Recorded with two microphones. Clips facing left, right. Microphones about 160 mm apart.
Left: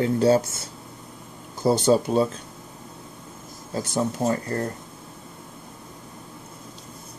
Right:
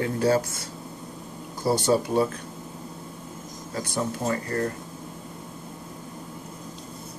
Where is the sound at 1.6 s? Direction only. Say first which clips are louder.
Left 3 dB; 20° left (ahead or behind).